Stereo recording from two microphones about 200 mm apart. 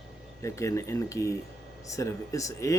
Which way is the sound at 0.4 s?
15° left (ahead or behind).